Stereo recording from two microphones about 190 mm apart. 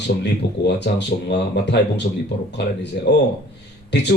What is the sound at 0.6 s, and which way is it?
A man's voice, 65° left (ahead or behind).